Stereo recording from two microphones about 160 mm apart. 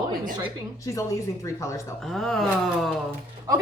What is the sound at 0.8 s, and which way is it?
Speech, 20° left (ahead or behind).